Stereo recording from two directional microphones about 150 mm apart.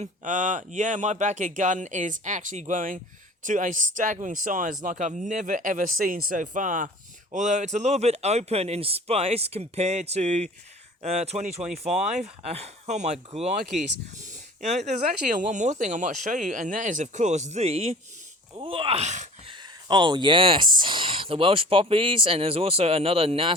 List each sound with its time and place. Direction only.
0.0 s a man's voice: 55° right (ahead or behind)
14.6 s speech: 50° right (ahead or behind)
19.5 s speech: 30° right (ahead or behind)